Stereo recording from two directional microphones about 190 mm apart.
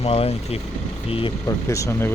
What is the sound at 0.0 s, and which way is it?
Speech, 30° left (ahead or behind).